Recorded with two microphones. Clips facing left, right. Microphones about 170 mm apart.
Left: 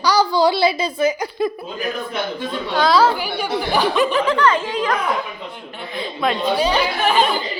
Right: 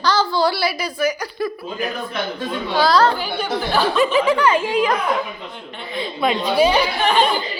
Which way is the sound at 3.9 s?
5° right (ahead or behind).